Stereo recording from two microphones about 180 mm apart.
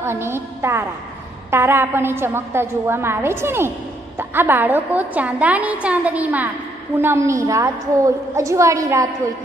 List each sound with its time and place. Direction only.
0.0 s a woman's voice: 15° right (ahead or behind)